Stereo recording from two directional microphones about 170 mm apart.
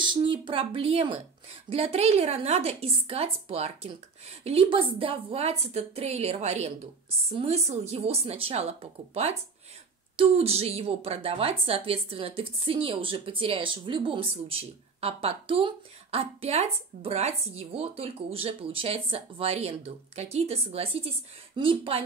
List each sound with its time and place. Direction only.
0.0 s a woman's voice: 30° right (ahead or behind)